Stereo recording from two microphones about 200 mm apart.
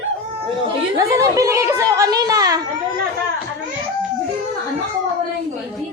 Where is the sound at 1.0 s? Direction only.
15° right (ahead or behind).